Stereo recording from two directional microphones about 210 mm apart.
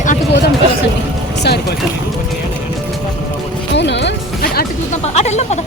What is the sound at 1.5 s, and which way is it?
Speech, 55° left (ahead or behind).